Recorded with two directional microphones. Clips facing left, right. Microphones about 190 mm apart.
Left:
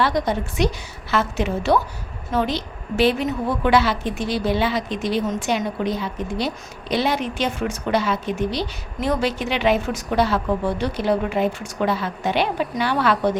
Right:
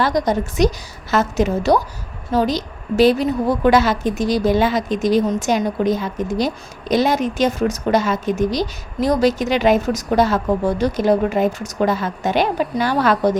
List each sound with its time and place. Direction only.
0.0 s a woman's voice: 40° right (ahead or behind)